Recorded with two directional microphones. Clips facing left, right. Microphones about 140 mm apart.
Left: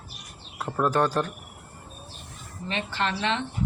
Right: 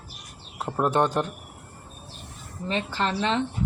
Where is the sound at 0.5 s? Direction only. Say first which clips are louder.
Right 1 dB; 20° right (ahead or behind).